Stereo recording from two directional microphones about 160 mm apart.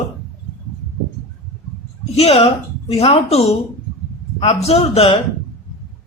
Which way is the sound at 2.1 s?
40° left (ahead or behind).